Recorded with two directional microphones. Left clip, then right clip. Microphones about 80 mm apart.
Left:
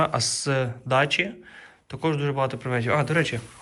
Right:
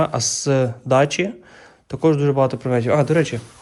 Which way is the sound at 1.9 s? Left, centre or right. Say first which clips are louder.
Right 9 dB; right.